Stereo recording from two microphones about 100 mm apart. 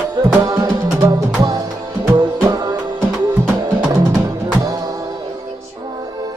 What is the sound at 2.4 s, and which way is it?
Music, 45° right (ahead or behind).